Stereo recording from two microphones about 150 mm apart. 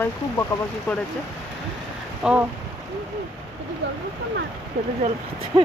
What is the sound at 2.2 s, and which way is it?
Speech, 5° right (ahead or behind).